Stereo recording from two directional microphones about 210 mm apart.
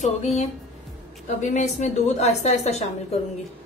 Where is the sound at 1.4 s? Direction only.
35° left (ahead or behind).